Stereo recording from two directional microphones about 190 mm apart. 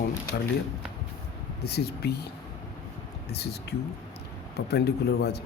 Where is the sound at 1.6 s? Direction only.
60° left (ahead or behind).